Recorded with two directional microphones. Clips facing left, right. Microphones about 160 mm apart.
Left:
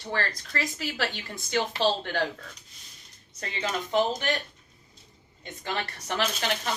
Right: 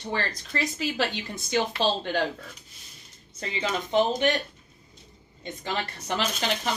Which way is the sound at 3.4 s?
20° right (ahead or behind).